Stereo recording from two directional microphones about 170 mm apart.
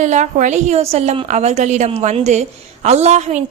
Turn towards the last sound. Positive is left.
turn(degrees=-40)  # may be behind; listen again after turning